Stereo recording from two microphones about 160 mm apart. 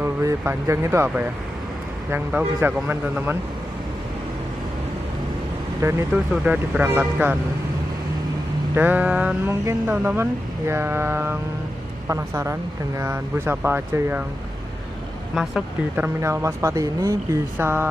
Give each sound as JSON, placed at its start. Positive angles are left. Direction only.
{"t": 0.0, "sound": "speech", "side_deg": -15}
{"t": 5.8, "sound": "speech", "side_deg": -15}
{"t": 8.7, "sound": "speech", "side_deg": -10}
{"t": 15.3, "sound": "speech", "side_deg": 0}
{"t": 16.2, "sound": "speech", "side_deg": -20}